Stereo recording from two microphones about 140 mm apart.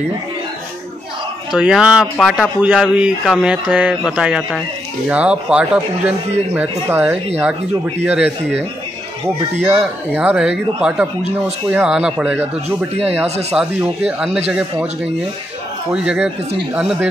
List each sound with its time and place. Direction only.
1.5 s speech: 5° right (ahead or behind)
2.6 s speech: 10° right (ahead or behind)
9.8 s speech: 10° right (ahead or behind)
12.9 s speech: 45° right (ahead or behind)
13.6 s speech: 5° right (ahead or behind)
15.9 s speech: 5° right (ahead or behind)